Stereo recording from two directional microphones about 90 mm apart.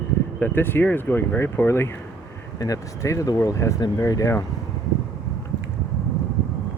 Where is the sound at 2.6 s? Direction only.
40° left (ahead or behind).